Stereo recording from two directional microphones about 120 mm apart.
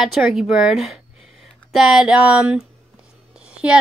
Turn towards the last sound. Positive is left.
turn(degrees=-10)  # may be behind; listen again after turning